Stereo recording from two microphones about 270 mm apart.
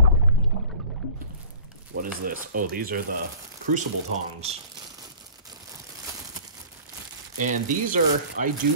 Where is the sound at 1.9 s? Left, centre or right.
Right.